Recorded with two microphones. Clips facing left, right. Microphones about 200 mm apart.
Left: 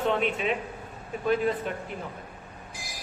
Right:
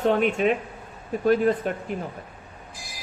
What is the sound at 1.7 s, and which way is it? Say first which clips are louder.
Speech: right 5 dB; 45° right (ahead or behind).